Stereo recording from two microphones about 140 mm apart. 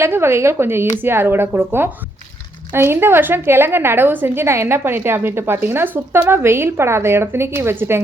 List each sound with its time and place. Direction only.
0.0 s a woman's voice: 15° right (ahead or behind)